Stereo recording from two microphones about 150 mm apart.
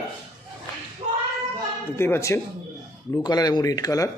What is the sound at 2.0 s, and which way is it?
Speech, 20° left (ahead or behind).